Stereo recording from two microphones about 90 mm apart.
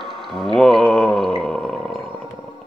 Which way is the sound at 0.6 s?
Centre (ahead or behind).